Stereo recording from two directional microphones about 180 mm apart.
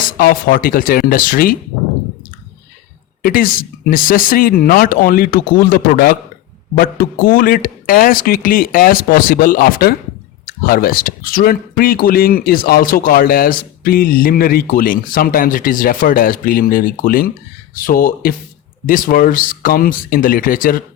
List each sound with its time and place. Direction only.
0.2 s speech: 55° left (ahead or behind)
3.2 s speech: 50° left (ahead or behind)